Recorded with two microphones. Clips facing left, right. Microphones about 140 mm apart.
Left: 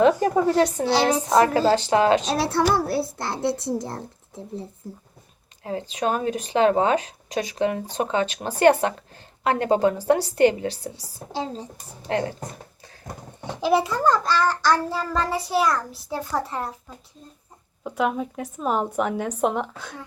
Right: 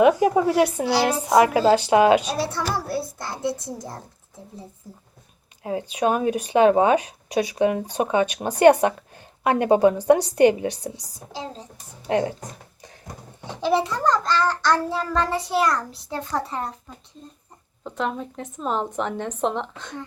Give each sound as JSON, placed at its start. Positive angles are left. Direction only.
{"t": 0.0, "sound": "a woman's voice", "side_deg": -10}
{"t": 2.2, "sound": "a child's voice", "side_deg": 65}
{"t": 5.6, "sound": "a woman's voice", "side_deg": -15}
{"t": 12.0, "sound": "a woman's voice", "side_deg": -15}
{"t": 13.4, "sound": "a child's voice", "side_deg": 10}
{"t": 17.8, "sound": "speech", "side_deg": 10}